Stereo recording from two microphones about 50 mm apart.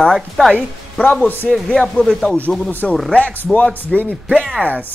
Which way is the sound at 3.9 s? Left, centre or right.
Centre.